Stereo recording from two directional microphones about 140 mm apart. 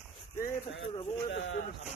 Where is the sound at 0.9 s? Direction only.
40° left (ahead or behind).